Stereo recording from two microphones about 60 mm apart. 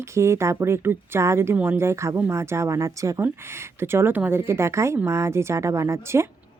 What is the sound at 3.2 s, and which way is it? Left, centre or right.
A woman's voice, right.